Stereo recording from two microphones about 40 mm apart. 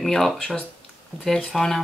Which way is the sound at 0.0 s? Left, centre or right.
Centre.